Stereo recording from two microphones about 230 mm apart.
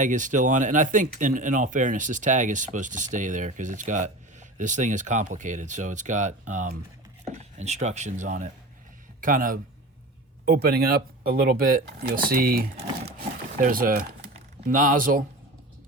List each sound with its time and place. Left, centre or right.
0.0 s speech: right